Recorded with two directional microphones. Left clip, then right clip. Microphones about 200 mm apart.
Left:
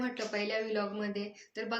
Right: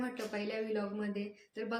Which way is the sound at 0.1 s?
5° right (ahead or behind).